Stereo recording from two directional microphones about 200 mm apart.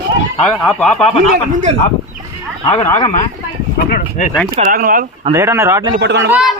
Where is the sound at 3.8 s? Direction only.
45° left (ahead or behind).